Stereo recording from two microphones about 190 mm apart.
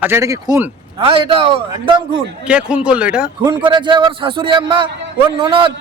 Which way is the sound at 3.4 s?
25° right (ahead or behind).